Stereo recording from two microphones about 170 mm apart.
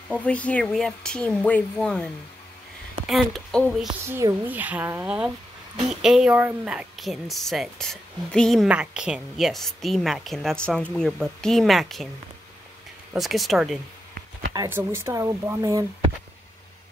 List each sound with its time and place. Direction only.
0.1 s speech: 5° left (ahead or behind)
3.1 s speech: centre (ahead or behind)
3.8 s a woman's voice: 15° right (ahead or behind); by 12.1 s centre (ahead or behind)
13.1 s speech: centre (ahead or behind)
14.5 s a woman's voice: 15° right (ahead or behind)